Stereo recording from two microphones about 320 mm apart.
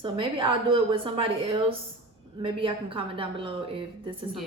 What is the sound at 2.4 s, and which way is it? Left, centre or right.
A woman's voice, centre.